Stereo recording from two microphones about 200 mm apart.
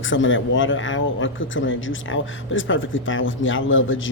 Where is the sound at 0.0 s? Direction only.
75° left (ahead or behind).